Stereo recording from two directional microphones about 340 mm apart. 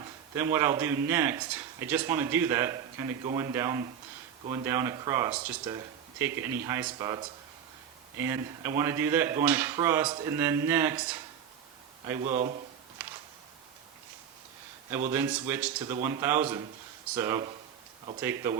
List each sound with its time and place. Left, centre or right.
0.3 s speech: centre
12.2 s speech: right
15.1 s speech: centre